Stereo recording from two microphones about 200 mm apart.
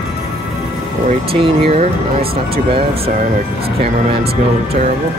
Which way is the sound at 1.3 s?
30° right (ahead or behind).